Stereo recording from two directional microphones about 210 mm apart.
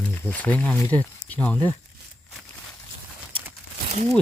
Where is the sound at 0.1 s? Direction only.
10° left (ahead or behind).